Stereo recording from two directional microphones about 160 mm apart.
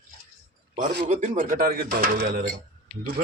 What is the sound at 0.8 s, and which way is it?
Speech, 50° right (ahead or behind).